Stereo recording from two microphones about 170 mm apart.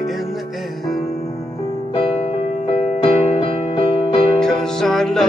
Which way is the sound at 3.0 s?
30° left (ahead or behind).